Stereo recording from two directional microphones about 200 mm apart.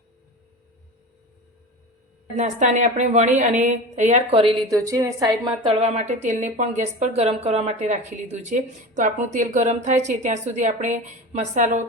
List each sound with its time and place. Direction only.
2.3 s a woman's voice: 35° right (ahead or behind)
4.7 s a woman's voice: 15° right (ahead or behind); by 11.8 s 40° right (ahead or behind)